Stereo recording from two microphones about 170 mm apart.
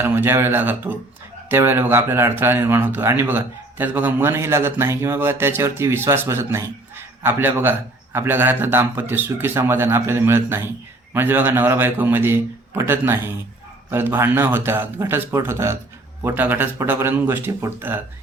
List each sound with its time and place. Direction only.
0.0 s speech: 15° right (ahead or behind)